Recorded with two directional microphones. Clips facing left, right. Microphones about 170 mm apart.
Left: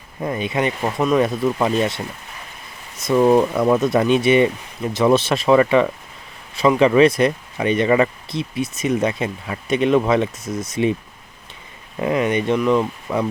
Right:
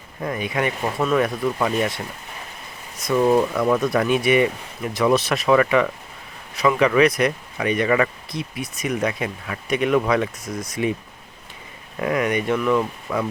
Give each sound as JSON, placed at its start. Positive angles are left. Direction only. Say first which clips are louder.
{"t": 0.2, "sound": "speech", "louder": "left 3 dB", "side_deg": 25}
{"t": 3.0, "sound": "speech", "louder": "left 3 dB", "side_deg": 25}
{"t": 11.9, "sound": "speech", "louder": "left 2 dB", "side_deg": 25}